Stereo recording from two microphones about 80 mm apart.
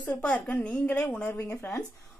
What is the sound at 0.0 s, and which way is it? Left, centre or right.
A woman's voice, centre.